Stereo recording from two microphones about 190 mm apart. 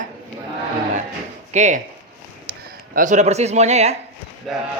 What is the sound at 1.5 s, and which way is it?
Speech, 40° right (ahead or behind).